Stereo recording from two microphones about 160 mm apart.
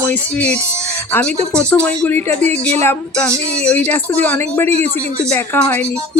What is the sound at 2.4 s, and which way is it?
Speech, 45° right (ahead or behind).